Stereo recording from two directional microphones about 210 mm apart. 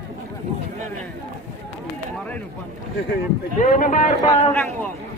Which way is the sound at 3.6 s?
35° left (ahead or behind).